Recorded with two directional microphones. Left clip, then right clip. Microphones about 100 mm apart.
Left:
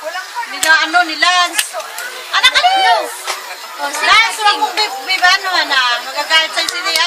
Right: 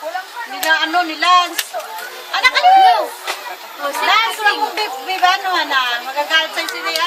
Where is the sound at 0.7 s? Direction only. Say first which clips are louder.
Left 4 dB; centre (ahead or behind).